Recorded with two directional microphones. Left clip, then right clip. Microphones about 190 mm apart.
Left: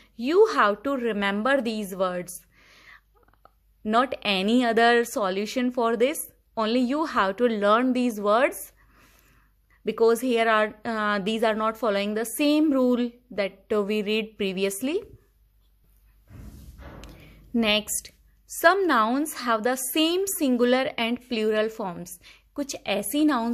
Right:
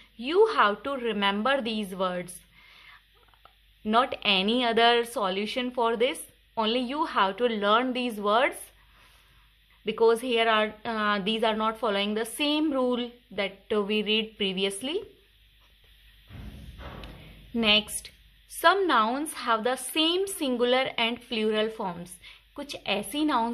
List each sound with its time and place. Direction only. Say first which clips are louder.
0.0 s a woman's voice: left 3 dB; 30° left (ahead or behind)
9.8 s a woman's voice: left 2 dB; 30° left (ahead or behind)
17.6 s a woman's voice: even; 35° left (ahead or behind)